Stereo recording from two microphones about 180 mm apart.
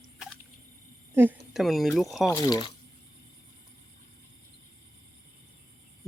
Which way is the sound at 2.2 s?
20° left (ahead or behind).